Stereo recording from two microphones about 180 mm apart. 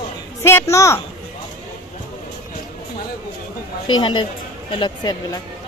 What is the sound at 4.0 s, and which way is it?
Speech, 25° left (ahead or behind).